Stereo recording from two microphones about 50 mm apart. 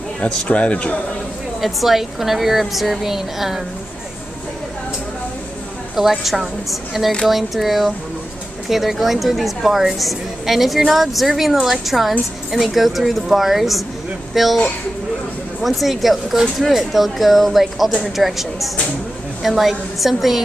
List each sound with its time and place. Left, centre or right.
0.5 s a man's voice: left
1.6 s a woman's voice: centre
5.9 s a woman's voice: centre
15.6 s a woman's voice: centre